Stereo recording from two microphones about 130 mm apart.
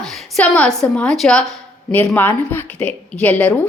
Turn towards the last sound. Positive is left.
turn(degrees=10)  # may be behind; listen again after turning